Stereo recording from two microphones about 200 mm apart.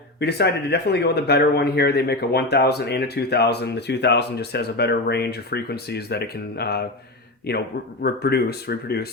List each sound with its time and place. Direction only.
0.2 s a man's voice: 55° left (ahead or behind)
8.0 s speech: 50° left (ahead or behind)